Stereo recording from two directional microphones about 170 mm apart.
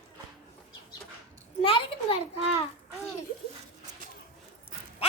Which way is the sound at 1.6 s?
30° left (ahead or behind).